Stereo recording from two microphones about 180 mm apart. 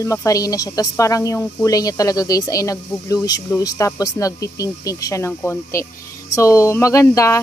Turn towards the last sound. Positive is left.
turn(degrees=15)  # may be behind; listen again after turning